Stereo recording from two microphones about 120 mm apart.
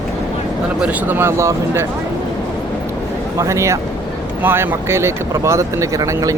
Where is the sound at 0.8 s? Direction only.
15° right (ahead or behind).